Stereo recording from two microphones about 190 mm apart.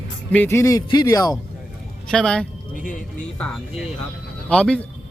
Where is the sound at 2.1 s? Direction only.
5° left (ahead or behind).